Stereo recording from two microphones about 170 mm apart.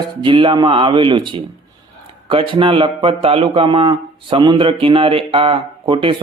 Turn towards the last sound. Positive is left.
turn(degrees=-30)  # may be behind; listen again after turning